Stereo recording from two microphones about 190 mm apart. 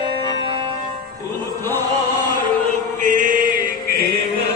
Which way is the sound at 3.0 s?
45° right (ahead or behind).